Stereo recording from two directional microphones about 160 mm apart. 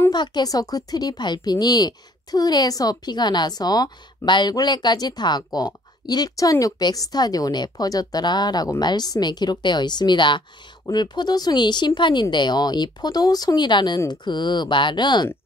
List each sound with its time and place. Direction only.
0.1 s speech: 25° left (ahead or behind)